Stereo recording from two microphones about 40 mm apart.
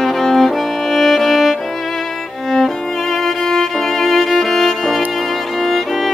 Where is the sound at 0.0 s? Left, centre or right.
Centre.